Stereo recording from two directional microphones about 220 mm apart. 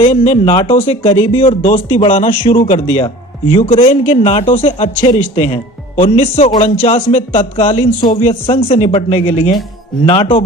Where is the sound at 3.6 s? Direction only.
30° left (ahead or behind).